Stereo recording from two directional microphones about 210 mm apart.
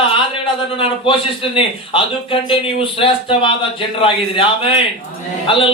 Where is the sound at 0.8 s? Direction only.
25° left (ahead or behind).